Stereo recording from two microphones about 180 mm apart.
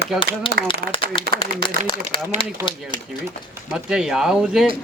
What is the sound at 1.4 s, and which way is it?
Speech, 30° left (ahead or behind).